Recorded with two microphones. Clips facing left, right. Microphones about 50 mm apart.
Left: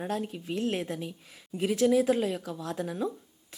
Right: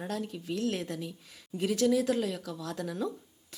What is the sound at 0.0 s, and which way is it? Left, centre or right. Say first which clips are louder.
Speech: left 3 dB; left.